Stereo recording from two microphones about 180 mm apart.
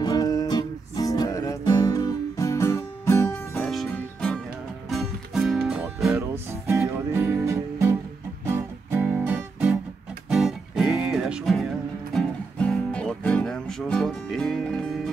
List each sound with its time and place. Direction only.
0.0 s music: 20° left (ahead or behind); by 6.1 s centre (ahead or behind)
6.1 s music: 15° right (ahead or behind); by 14.9 s centre (ahead or behind)